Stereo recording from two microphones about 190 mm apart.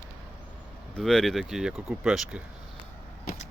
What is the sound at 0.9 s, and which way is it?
Speech, 5° left (ahead or behind).